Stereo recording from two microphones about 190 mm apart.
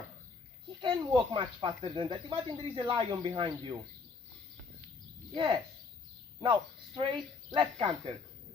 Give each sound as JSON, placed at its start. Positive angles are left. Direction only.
{"t": 0.8, "sound": "speech", "side_deg": -25}
{"t": 5.3, "sound": "speech", "side_deg": -25}